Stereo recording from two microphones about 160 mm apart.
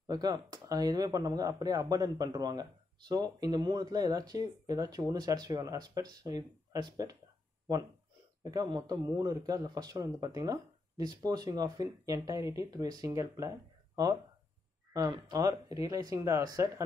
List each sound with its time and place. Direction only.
0.0 s a man's voice: 25° right (ahead or behind)
8.5 s a man's voice: 25° right (ahead or behind)